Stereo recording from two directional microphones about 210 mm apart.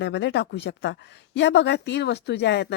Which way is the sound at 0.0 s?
60° left (ahead or behind).